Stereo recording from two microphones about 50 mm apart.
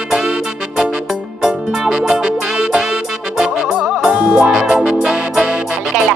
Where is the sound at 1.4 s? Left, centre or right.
Centre.